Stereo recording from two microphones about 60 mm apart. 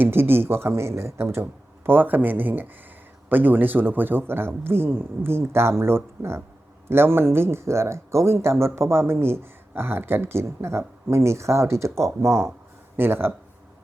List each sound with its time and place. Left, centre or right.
0.0 s speech: right
13.0 s speech: right